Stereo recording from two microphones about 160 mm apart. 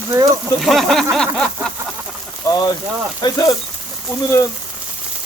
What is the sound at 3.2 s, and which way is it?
Sizzle, 25° left (ahead or behind).